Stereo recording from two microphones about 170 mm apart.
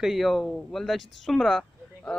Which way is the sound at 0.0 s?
Centre (ahead or behind).